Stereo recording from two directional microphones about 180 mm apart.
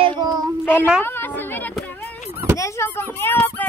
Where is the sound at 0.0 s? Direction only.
25° right (ahead or behind).